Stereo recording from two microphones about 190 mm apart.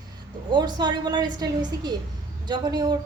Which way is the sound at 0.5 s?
20° right (ahead or behind).